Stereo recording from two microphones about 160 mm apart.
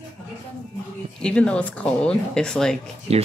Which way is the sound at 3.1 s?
40° right (ahead or behind).